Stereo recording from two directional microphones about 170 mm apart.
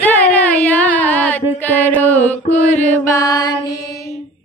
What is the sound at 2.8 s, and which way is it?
Mantra, 10° left (ahead or behind).